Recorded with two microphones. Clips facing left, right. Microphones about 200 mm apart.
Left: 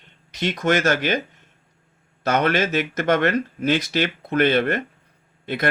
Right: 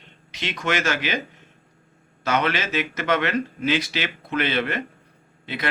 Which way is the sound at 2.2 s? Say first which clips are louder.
Left 4 dB; 45° left (ahead or behind).